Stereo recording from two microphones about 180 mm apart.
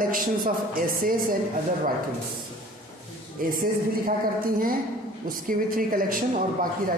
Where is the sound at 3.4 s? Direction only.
50° right (ahead or behind).